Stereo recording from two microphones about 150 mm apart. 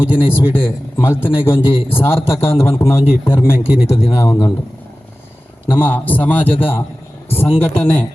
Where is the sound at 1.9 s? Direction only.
15° left (ahead or behind).